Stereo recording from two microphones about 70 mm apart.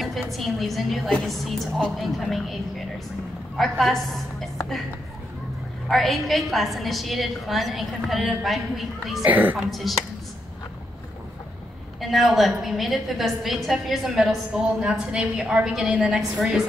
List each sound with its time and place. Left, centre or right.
0.0 s a woman's voice: centre
5.9 s a woman's voice: centre
9.2 s a woman's voice: right
9.7 s a woman's voice: centre
12.0 s a woman's voice: centre